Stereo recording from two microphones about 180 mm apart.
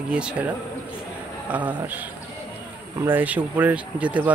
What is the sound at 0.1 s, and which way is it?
Speech, 5° right (ahead or behind).